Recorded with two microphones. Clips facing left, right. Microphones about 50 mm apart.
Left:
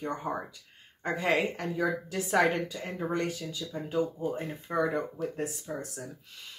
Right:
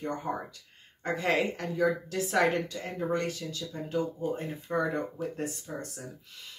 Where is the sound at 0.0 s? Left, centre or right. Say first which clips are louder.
Even; centre.